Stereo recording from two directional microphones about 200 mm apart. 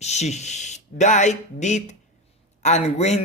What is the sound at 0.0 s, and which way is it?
A man's voice, 35° left (ahead or behind).